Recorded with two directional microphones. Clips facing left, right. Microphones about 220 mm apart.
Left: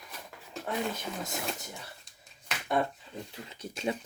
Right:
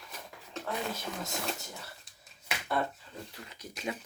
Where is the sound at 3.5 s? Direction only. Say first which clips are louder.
Left 5 dB; 30° left (ahead or behind).